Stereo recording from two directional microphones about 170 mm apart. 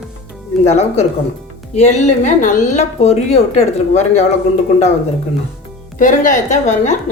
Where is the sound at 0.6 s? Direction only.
40° left (ahead or behind).